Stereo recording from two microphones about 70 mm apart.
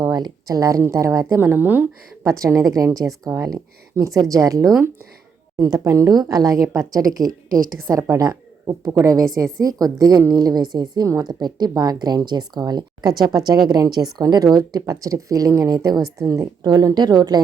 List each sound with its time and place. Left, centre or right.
0.0 s a sound: right
0.4 s a woman's voice: right
1.4 s speech: right
2.2 s a woman's voice: right
4.2 s speech: right
5.8 s a woman's voice: right
6.3 s speech: right
7.9 s a woman's voice: right
9.0 s speech: right
10.3 s a woman's voice: right
11.0 s a woman's voice: right
11.3 s a woman's voice: right
13.1 s speech: right
16.6 s a woman's voice: right